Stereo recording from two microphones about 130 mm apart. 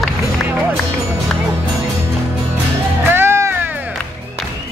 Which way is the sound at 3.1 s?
20° right (ahead or behind).